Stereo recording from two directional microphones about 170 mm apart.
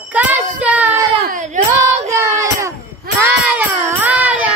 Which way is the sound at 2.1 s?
15° right (ahead or behind).